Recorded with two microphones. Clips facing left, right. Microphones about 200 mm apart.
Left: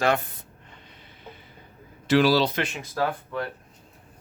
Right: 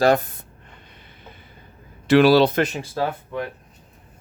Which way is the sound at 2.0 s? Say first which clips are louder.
Right 6 dB; 60° right (ahead or behind).